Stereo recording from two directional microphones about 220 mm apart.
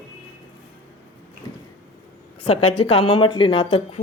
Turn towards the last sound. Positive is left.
turn(degrees=25)  # may be behind; listen again after turning